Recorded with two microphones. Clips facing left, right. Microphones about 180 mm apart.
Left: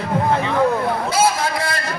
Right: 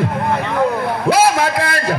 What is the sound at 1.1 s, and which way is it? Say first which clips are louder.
Speech: right 7 dB; 65° right (ahead or behind).